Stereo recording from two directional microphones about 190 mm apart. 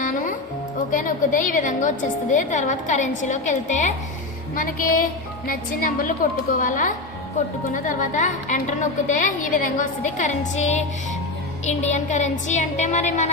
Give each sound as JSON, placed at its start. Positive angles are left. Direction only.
{"t": 0.0, "sound": "music", "side_deg": 45}
{"t": 0.9, "sound": "a woman's voice", "side_deg": 45}